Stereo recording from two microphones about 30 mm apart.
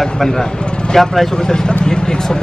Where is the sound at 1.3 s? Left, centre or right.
Left.